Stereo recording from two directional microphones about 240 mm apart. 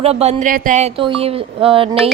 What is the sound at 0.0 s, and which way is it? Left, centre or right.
A woman's voice, right.